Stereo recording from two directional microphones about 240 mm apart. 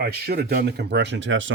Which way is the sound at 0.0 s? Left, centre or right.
Right.